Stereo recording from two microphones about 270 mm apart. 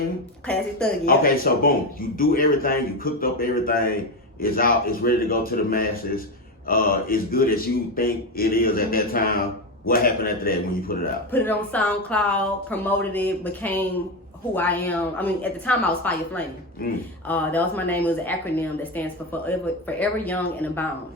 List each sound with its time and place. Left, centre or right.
0.4 s a woman's voice: centre
1.0 s a man's voice: left
11.3 s a woman's voice: centre
17.2 s speech: centre